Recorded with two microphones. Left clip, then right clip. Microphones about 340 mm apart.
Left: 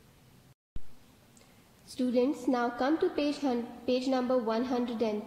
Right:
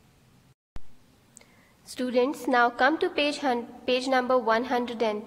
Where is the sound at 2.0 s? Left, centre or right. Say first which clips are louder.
Right 4 dB; right.